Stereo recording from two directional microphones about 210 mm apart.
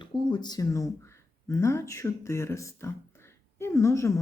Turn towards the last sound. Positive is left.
turn(degrees=15)  # may be behind; listen again after turning